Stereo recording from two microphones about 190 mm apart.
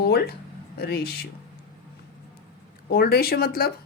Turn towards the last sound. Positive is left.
turn(degrees=55)  # may be behind; listen again after turning